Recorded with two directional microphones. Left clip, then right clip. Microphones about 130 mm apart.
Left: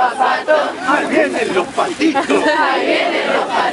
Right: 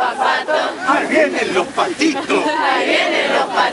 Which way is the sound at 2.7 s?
20° right (ahead or behind).